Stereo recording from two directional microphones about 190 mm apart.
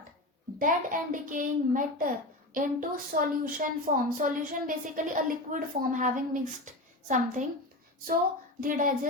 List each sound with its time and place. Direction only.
0.6 s a child's voice: 45° right (ahead or behind)
8.6 s a child's voice: 45° right (ahead or behind)